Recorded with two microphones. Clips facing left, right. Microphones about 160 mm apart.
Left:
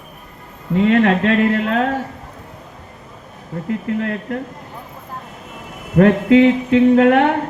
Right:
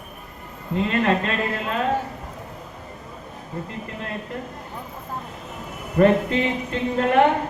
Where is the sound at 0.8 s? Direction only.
70° left (ahead or behind).